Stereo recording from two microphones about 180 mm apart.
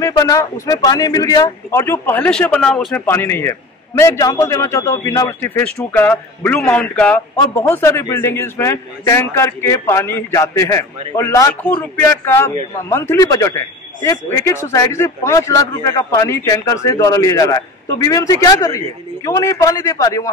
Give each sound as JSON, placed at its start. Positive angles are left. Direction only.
{"t": 0.0, "sound": "speech", "side_deg": 20}
{"t": 3.1, "sound": "speech", "side_deg": 15}